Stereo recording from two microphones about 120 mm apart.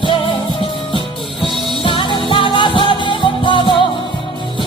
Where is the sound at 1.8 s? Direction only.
45° left (ahead or behind).